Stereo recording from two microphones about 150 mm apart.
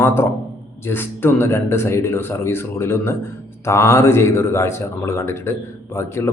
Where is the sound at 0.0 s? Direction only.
15° left (ahead or behind).